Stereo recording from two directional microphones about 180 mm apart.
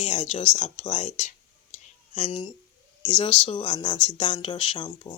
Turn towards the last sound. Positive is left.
turn(degrees=25)  # may be behind; listen again after turning